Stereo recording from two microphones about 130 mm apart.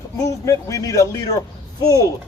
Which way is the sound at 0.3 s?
25° left (ahead or behind).